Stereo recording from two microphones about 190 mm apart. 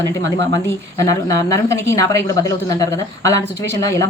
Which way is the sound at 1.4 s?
15° left (ahead or behind).